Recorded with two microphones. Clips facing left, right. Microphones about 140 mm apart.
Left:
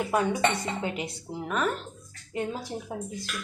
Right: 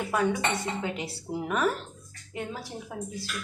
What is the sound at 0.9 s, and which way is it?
Speech, 5° right (ahead or behind).